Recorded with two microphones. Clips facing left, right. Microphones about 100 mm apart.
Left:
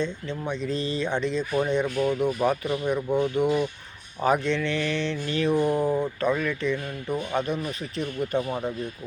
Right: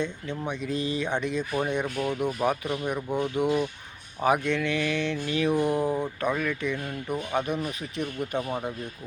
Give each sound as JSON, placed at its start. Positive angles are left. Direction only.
{"t": 0.0, "sound": "mantra", "side_deg": -15}